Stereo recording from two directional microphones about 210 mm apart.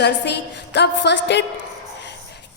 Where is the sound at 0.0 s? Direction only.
55° left (ahead or behind).